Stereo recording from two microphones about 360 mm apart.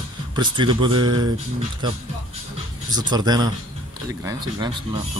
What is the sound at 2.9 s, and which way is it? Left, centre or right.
Speech, centre.